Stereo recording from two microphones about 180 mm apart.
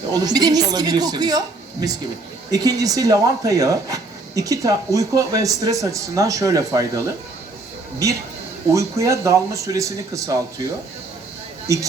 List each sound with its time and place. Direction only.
0.1 s speech: 20° right (ahead or behind)
8.7 s speech: 15° right (ahead or behind)